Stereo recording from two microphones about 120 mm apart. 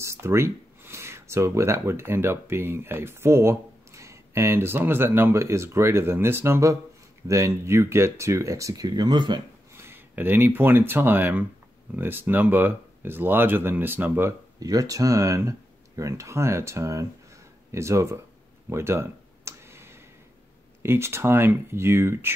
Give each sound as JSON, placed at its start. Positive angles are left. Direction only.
{"t": 0.0, "sound": "speech", "side_deg": -20}
{"t": 9.8, "sound": "speech", "side_deg": -20}
{"t": 14.6, "sound": "speech", "side_deg": -30}
{"t": 18.7, "sound": "a sound", "side_deg": -20}
{"t": 20.8, "sound": "speech", "side_deg": -20}